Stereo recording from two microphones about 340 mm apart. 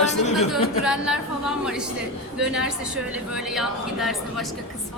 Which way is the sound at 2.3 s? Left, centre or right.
Centre.